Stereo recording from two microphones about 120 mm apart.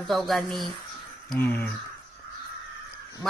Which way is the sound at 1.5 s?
15° left (ahead or behind).